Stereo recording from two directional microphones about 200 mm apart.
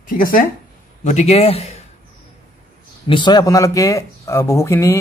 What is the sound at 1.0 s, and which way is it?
Speech, 35° left (ahead or behind).